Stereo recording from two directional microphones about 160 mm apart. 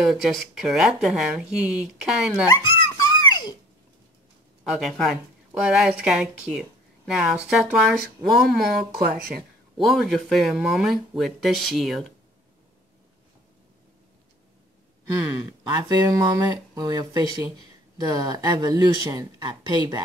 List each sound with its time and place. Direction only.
0.0 s speech: centre (ahead or behind)
2.4 s a sound: 25° left (ahead or behind)
4.6 s speech: centre (ahead or behind)
8.9 s speech: 70° right (ahead or behind)
9.8 s speech: centre (ahead or behind)
15.3 s speech: 20° right (ahead or behind)